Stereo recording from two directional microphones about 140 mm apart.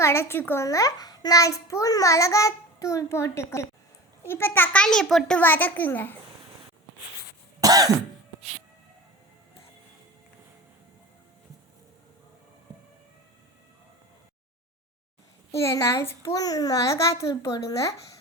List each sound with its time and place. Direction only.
0.0 s a child's voice: 20° left (ahead or behind)
7.6 s cough: 25° right (ahead or behind)
15.5 s a child's voice: 20° left (ahead or behind)